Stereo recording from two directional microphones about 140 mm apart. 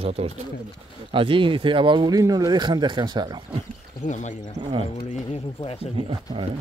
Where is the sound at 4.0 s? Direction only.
60° left (ahead or behind).